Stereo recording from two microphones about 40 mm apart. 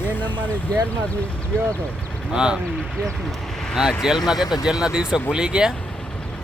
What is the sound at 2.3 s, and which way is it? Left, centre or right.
Speech, centre.